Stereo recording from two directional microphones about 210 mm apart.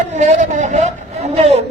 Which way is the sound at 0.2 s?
35° right (ahead or behind).